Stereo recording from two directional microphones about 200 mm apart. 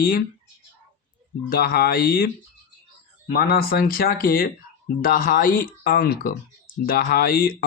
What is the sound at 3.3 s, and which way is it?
Speech, 50° left (ahead or behind).